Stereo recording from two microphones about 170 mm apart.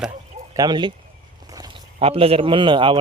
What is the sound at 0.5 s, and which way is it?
Speech, 25° right (ahead or behind).